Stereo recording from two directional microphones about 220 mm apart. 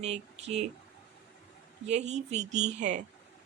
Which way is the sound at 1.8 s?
30° right (ahead or behind).